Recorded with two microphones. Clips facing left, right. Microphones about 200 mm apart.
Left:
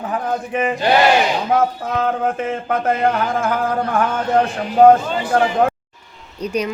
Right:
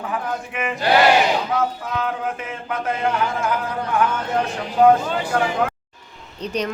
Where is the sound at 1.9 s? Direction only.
45° left (ahead or behind).